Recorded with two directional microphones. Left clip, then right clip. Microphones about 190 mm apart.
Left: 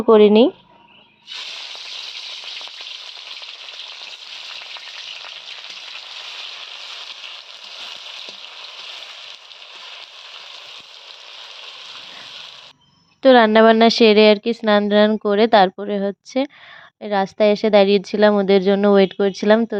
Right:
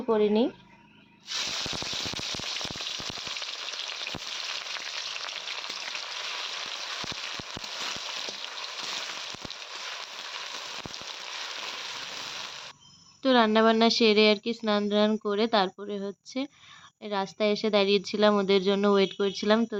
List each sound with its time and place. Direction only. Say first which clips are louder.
0.0 s speech: left 13 dB; 50° left (ahead or behind)
13.2 s a woman's voice: left 11 dB; 45° left (ahead or behind)